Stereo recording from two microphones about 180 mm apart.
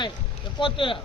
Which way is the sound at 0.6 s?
30° left (ahead or behind).